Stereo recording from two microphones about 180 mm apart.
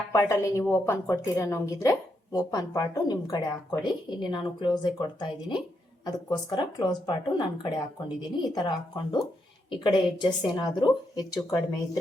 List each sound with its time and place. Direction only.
0.1 s a woman's voice: 15° left (ahead or behind)